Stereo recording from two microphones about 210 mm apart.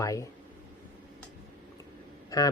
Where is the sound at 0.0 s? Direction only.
15° left (ahead or behind).